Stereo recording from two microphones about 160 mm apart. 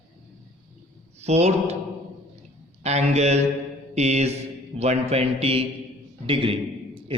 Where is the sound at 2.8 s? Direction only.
45° right (ahead or behind).